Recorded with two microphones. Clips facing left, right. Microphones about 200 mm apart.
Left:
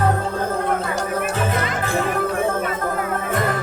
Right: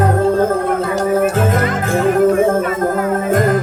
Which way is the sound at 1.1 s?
45° right (ahead or behind).